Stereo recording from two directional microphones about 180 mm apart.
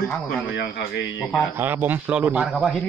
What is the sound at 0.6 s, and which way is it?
Speech, 85° left.